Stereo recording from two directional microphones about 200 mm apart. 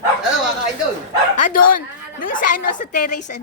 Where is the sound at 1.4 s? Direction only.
45° left (ahead or behind).